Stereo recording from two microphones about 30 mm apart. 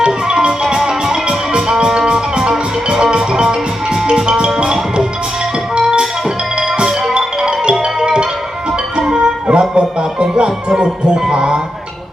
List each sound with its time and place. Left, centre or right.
0.8 s music: centre
1.3 s music: right